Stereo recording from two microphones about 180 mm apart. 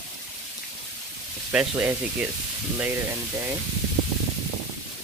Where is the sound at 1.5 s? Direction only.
5° right (ahead or behind).